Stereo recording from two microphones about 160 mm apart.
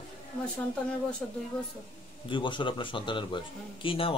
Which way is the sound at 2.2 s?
30° left (ahead or behind).